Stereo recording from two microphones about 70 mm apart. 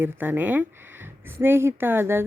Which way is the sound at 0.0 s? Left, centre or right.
Right.